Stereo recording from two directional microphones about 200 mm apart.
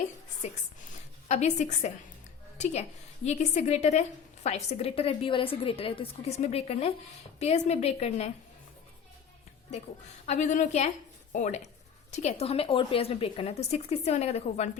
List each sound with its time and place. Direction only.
1.3 s a woman's voice: 35° left (ahead or behind)
3.2 s a woman's voice: 35° left (ahead or behind)
10.2 s a woman's voice: 35° left (ahead or behind)